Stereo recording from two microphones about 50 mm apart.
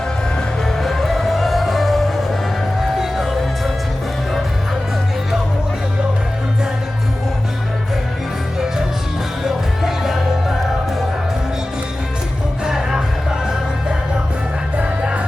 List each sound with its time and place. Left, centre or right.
0.8 s music: centre
9.4 s music: centre
12.6 s music: centre
14.8 s music: right